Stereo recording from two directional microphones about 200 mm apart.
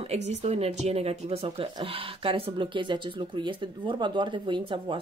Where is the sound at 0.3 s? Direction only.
30° right (ahead or behind).